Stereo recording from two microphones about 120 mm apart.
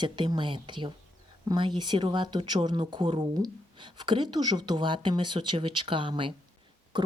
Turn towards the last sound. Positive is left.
turn(degrees=-40)  # may be behind; listen again after turning